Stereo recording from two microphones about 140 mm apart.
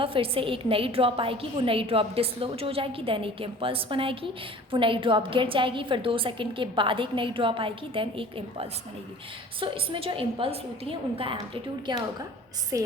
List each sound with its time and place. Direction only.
0.0 s a woman's voice: 40° right (ahead or behind)
12.7 s a woman's voice: 25° right (ahead or behind)